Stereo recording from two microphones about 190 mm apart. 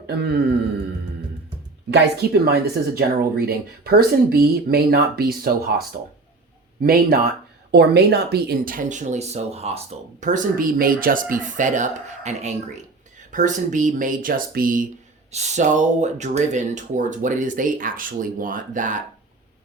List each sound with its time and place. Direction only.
0.1 s a man's voice: 55° right (ahead or behind)
1.9 s speech: 55° right (ahead or behind)
6.8 s speech: 55° right (ahead or behind)
15.3 s speech: 35° right (ahead or behind)